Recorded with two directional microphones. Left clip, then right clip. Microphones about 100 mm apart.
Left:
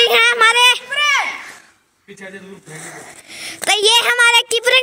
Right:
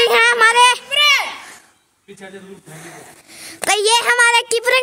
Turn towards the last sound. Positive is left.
turn(degrees=30)  # may be behind; listen again after turning